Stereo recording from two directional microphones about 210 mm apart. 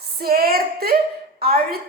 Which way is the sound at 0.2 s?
45° right (ahead or behind).